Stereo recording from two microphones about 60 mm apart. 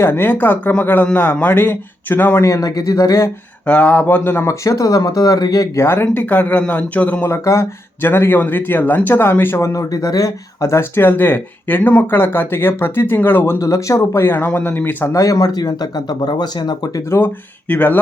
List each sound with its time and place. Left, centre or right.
0.0 s speech: left
2.4 s speech: left
3.7 s a man's voice: left
4.4 s speech: left
5.7 s speech: left
6.2 s a man's voice: left
7.3 s speech: left
8.0 s speech: left
9.6 s speech: left
9.9 s speech: left
10.9 s speech: left
14.3 s speech: left
15.1 s speech: left
17.1 s speech: left